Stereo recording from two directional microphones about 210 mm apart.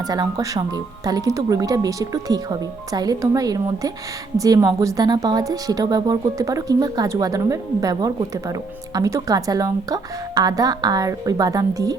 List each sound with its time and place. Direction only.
0.1 s a woman's voice: 20° right (ahead or behind)